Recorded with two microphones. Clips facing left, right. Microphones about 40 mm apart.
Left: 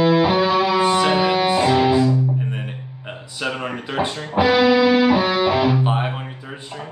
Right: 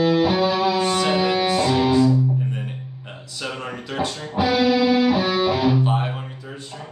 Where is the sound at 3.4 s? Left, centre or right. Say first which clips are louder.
Left 5 dB; left.